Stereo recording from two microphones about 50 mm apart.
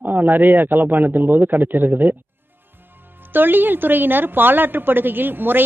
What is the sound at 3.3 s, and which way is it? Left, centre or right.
A woman's voice, right.